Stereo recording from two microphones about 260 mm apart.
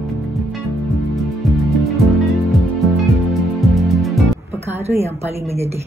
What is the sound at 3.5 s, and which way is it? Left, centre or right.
Music, centre.